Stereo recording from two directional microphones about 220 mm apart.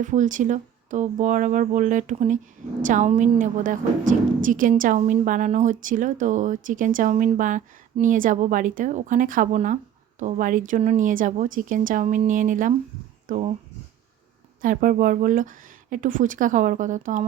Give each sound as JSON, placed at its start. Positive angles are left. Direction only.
{"t": 0.0, "sound": "a woman's voice", "side_deg": -35}
{"t": 14.6, "sound": "a woman's voice", "side_deg": -40}